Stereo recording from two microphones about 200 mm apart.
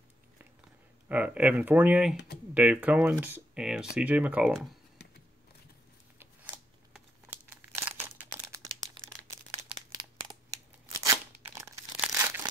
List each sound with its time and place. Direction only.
1.0 s speech: 5° right (ahead or behind)
6.1 s crumpling: 10° right (ahead or behind)
11.0 s tearing: 15° right (ahead or behind)
12.0 s crumpling: 5° right (ahead or behind)